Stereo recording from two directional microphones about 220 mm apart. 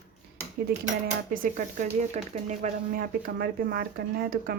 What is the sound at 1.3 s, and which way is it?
A woman's voice, 35° right (ahead or behind).